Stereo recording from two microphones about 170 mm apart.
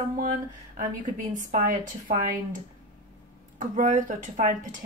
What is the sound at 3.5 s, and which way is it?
Speech, 50° right (ahead or behind).